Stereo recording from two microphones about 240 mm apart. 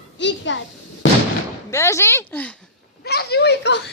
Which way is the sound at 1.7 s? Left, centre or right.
Centre.